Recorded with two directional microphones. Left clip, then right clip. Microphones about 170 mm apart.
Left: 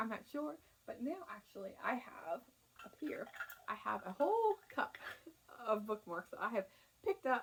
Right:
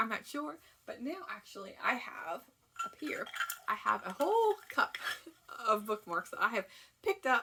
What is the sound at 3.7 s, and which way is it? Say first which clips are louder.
Speech: right 8 dB; 20° right (ahead or behind).